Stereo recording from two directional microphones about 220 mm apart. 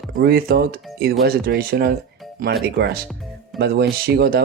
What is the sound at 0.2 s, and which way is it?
Speech, 45° right (ahead or behind).